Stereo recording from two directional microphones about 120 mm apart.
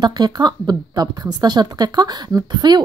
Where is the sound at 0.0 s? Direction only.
35° right (ahead or behind).